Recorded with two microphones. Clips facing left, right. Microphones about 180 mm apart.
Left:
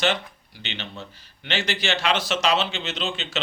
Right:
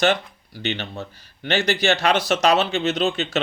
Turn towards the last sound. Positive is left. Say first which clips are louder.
# right 9 dB
turn(degrees=-40)  # may be behind; listen again after turning